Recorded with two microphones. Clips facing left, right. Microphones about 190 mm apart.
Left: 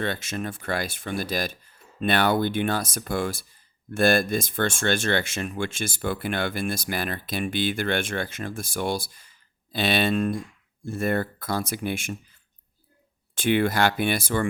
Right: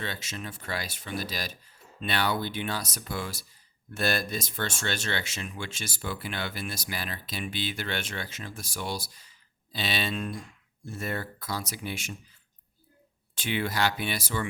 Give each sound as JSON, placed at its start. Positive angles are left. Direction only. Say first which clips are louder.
{"t": 0.0, "sound": "speech", "louder": "left 8 dB", "side_deg": 55}
{"t": 13.3, "sound": "speech", "louder": "left 8 dB", "side_deg": 55}